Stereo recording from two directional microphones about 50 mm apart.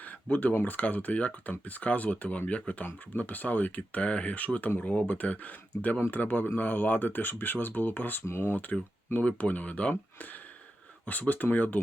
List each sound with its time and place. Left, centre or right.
0.0 s speech: left
8.3 s speech: left
9.1 s speech: left